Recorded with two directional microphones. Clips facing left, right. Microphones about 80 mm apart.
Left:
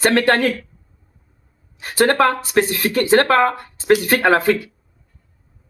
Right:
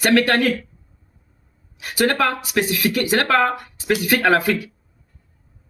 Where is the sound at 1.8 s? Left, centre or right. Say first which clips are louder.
Left 4 dB; left.